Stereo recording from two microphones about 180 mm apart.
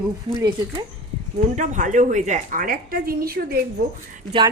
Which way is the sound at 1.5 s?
45° right (ahead or behind).